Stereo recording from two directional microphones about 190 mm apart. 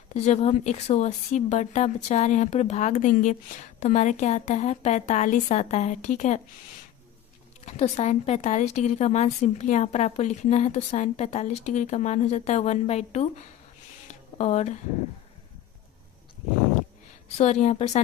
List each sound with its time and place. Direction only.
0.1 s speech: 35° left (ahead or behind)
7.6 s speech: 35° left (ahead or behind)
14.3 s speech: 35° left (ahead or behind)
17.3 s speech: 35° left (ahead or behind)